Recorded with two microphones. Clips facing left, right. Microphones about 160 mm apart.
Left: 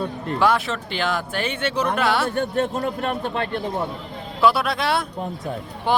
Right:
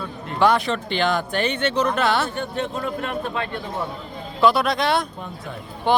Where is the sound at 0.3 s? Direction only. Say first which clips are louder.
Right 2 dB; 5° left (ahead or behind).